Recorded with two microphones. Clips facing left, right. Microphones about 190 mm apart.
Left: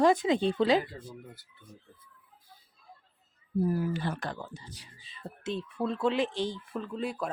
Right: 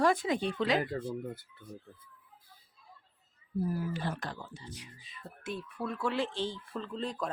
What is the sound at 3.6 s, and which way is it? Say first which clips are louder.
Speech: left 4 dB; 60° left (ahead or behind).